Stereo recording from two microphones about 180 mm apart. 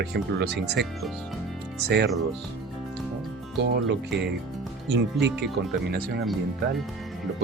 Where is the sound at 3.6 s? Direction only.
70° right (ahead or behind).